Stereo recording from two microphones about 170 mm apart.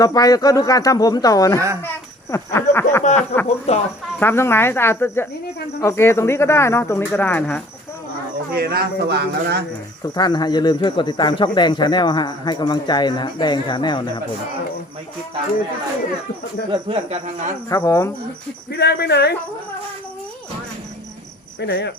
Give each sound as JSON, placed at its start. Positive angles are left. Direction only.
{"t": 0.0, "sound": "speech", "side_deg": 20}
{"t": 1.5, "sound": "speech", "side_deg": -15}
{"t": 2.3, "sound": "speech", "side_deg": 15}
{"t": 3.0, "sound": "speech", "side_deg": 45}
{"t": 4.2, "sound": "speech", "side_deg": 15}
{"t": 8.5, "sound": "a man's voice", "side_deg": -65}
{"t": 10.2, "sound": "speech", "side_deg": 25}
{"t": 16.9, "sound": "speech", "side_deg": -40}
{"t": 17.7, "sound": "speech", "side_deg": 20}
{"t": 18.7, "sound": "speech", "side_deg": 75}
{"t": 21.6, "sound": "speech", "side_deg": 85}